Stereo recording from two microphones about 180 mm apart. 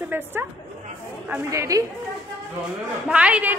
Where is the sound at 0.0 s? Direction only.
10° right (ahead or behind).